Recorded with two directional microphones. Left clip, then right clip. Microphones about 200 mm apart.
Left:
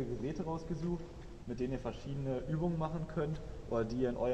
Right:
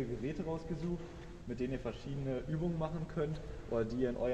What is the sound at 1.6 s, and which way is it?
A man's voice, 20° left (ahead or behind).